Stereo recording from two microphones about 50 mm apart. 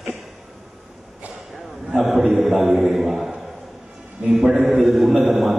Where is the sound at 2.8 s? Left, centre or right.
Centre.